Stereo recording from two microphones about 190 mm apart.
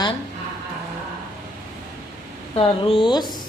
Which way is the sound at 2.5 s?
30° left (ahead or behind).